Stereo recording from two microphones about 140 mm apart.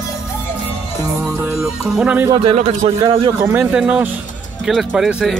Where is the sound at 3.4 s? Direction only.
10° right (ahead or behind).